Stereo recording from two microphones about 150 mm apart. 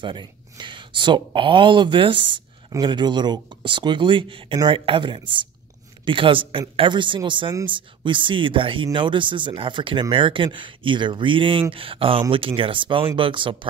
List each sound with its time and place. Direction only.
0.0 s speech: 30° right (ahead or behind)